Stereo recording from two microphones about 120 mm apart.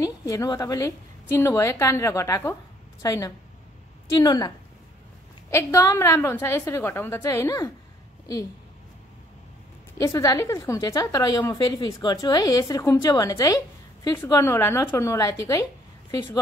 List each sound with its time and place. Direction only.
0.0 s a woman's voice: 30° left (ahead or behind)
5.5 s a woman's voice: 25° left (ahead or behind)
9.9 s a woman's voice: 30° left (ahead or behind)